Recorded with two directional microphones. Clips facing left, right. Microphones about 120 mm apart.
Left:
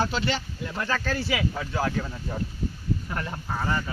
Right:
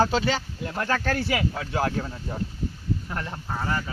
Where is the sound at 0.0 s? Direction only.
45° right (ahead or behind).